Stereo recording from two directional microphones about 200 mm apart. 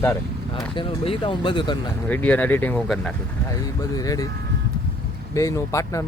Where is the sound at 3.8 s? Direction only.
15° left (ahead or behind).